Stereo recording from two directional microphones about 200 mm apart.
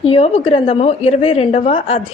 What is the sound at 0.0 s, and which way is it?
A woman's voice, 30° left (ahead or behind).